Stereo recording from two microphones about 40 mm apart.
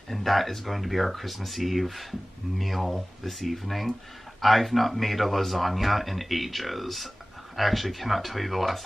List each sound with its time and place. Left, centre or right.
0.1 s speech: centre